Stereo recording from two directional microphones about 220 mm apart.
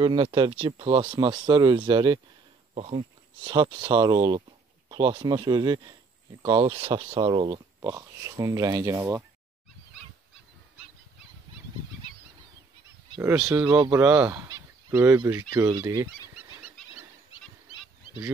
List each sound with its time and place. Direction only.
0.0 s speech: 20° right (ahead or behind)
13.6 s speech: 5° right (ahead or behind)
15.5 s fowl: 15° right (ahead or behind)